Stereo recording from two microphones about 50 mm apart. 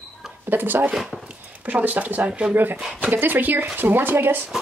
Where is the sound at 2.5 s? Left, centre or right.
Right.